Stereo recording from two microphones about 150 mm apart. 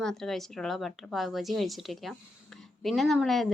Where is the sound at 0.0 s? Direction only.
5° left (ahead or behind).